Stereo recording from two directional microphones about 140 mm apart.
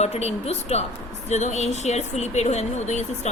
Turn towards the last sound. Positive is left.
turn(degrees=55)  # may be behind; listen again after turning